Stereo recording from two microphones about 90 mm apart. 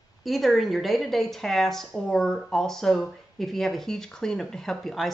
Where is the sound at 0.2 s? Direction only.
Centre (ahead or behind).